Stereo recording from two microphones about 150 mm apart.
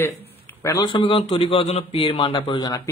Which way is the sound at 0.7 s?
35° left (ahead or behind).